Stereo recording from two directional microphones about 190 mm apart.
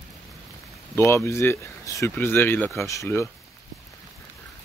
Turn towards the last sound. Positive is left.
turn(degrees=15)  # may be behind; listen again after turning